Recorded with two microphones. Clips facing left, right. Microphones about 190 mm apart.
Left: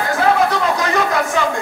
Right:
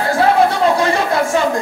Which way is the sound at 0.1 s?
30° right (ahead or behind).